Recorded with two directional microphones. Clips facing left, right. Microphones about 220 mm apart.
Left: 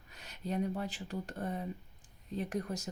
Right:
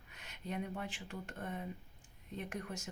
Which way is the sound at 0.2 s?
35° left (ahead or behind).